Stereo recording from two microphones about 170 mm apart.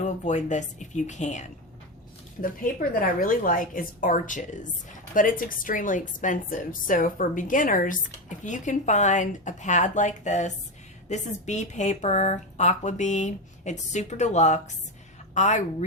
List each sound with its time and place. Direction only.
0.0 s a woman's voice: 45° left (ahead or behind)
2.4 s a woman's voice: 55° left (ahead or behind)